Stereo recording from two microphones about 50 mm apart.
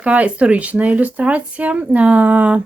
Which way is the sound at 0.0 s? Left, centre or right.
Right.